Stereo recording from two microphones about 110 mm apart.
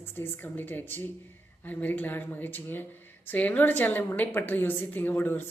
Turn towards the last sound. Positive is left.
turn(degrees=15)  # may be behind; listen again after turning